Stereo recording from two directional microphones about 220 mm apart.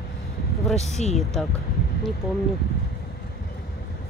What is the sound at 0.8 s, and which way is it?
Speech, 30° left (ahead or behind).